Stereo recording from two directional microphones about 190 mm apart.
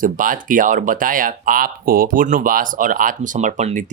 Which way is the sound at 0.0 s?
45° right (ahead or behind).